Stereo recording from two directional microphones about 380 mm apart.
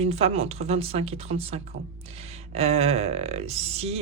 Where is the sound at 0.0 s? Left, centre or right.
Centre.